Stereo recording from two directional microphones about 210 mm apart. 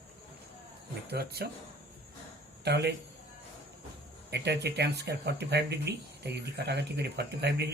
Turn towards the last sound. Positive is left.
turn(degrees=-50)  # may be behind; listen again after turning